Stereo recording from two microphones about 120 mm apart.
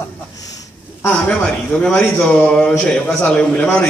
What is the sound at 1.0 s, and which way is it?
A man's voice, 15° left (ahead or behind).